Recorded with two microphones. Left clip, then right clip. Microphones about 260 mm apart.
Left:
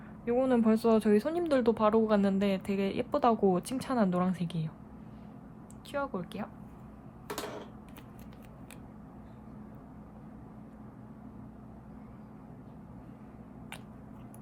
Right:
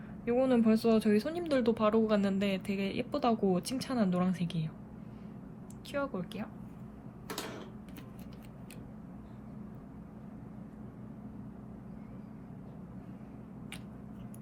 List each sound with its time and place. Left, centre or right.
0.3 s speech: centre
5.9 s speech: centre